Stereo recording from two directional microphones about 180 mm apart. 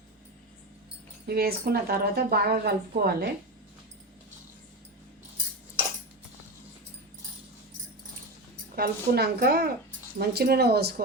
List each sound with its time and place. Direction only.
1.3 s speech: 60° right (ahead or behind)
8.7 s speech: 60° right (ahead or behind)